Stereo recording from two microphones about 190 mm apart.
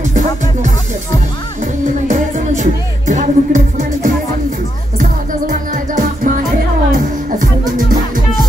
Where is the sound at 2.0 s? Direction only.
40° right (ahead or behind).